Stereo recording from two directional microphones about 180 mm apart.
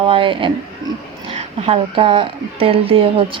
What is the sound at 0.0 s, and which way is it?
A woman's voice, 30° right (ahead or behind).